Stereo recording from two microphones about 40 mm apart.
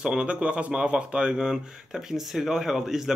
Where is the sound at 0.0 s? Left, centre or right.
Right.